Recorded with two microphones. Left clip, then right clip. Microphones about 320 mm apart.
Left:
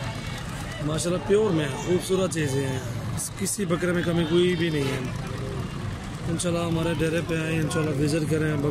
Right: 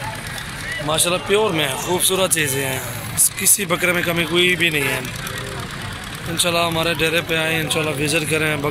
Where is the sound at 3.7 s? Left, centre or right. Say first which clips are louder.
Right 7 dB; right.